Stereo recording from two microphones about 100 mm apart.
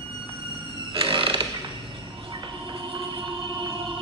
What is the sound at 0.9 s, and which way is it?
Music, 65° right (ahead or behind).